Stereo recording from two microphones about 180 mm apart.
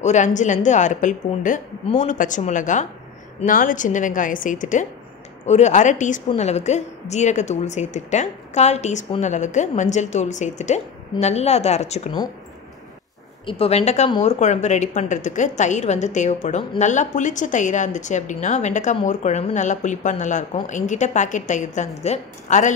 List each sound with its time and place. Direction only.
0.0 s a woman's voice: 40° left (ahead or behind)
13.5 s a woman's voice: 35° left (ahead or behind)